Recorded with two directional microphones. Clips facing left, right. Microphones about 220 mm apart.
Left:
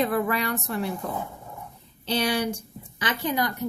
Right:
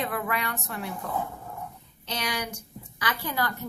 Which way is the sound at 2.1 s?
30° left (ahead or behind).